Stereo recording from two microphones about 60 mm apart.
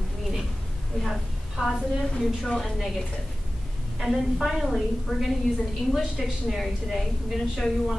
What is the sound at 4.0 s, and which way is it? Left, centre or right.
A woman's voice, centre.